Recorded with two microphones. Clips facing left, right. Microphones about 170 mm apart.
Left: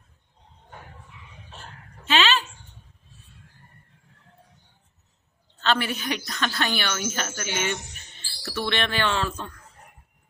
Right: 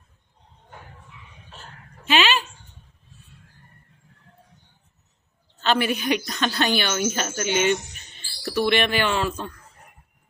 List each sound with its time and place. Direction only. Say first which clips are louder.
2.0 s dog: right 1 dB; 15° right (ahead or behind)
5.6 s a woman's voice: right 3 dB; 15° right (ahead or behind)